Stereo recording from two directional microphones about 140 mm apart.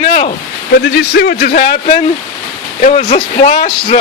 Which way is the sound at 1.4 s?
90° left.